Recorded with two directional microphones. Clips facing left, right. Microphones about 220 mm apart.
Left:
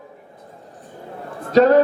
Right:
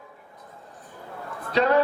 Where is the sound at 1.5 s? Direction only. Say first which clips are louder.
Left 8 dB; 45° left (ahead or behind).